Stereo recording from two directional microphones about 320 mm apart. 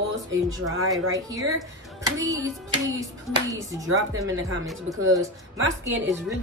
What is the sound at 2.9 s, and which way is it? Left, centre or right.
A woman's voice, centre.